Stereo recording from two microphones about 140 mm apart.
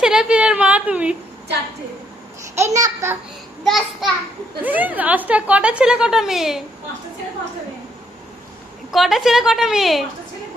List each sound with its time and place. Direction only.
0.0 s a sound: 5° right (ahead or behind)
2.6 s a child's voice: 20° right (ahead or behind)
3.6 s a woman's voice: centre (ahead or behind)
4.6 s a woman's voice: 10° right (ahead or behind)
8.9 s a woman's voice: centre (ahead or behind)